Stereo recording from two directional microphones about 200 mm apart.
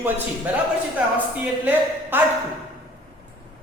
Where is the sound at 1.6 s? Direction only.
10° right (ahead or behind).